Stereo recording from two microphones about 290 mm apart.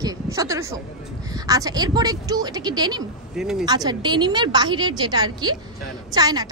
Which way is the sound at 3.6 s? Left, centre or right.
Centre.